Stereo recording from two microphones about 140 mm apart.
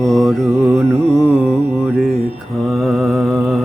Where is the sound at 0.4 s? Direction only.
15° right (ahead or behind).